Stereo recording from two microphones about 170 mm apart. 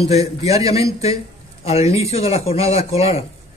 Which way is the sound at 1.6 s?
35° left (ahead or behind).